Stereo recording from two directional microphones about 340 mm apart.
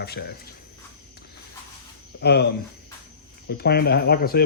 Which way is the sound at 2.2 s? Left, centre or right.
Left.